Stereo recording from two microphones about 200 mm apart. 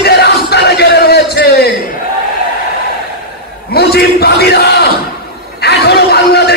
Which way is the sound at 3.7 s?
50° left (ahead or behind).